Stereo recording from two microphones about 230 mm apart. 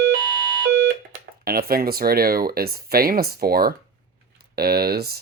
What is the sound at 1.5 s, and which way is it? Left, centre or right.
Speech, right.